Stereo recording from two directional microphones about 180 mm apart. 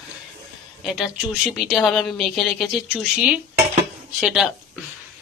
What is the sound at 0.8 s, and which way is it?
A man's voice, 5° right (ahead or behind).